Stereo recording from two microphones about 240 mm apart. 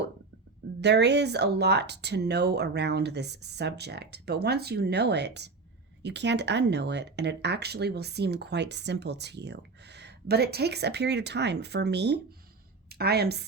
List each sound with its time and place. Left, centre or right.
0.8 s a woman's voice: right